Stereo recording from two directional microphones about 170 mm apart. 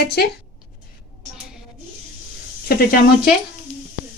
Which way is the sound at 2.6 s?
60° left (ahead or behind).